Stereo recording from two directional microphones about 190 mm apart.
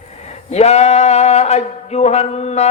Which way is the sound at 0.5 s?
35° left (ahead or behind).